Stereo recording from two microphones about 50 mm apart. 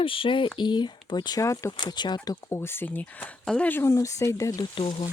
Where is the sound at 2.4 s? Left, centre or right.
Left.